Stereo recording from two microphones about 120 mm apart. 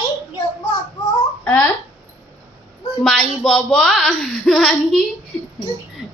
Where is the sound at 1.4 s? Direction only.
15° left (ahead or behind).